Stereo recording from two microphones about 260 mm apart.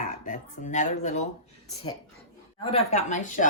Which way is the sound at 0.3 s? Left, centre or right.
Left.